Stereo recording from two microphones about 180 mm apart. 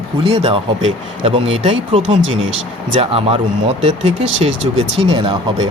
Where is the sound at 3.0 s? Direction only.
30° right (ahead or behind).